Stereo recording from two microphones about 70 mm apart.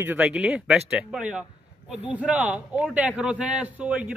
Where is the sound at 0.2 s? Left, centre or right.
Centre.